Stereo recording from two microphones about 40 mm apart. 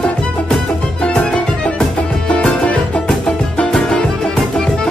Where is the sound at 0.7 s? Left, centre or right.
Left.